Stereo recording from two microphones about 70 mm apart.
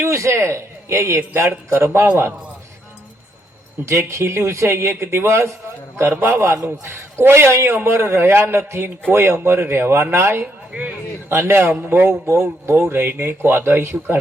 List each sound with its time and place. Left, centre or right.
0.0 s a man's voice: right
3.8 s a man's voice: right
10.7 s a man's voice: right
11.3 s a man's voice: right